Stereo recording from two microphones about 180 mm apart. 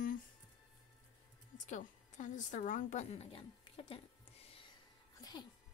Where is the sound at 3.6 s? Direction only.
30° left (ahead or behind).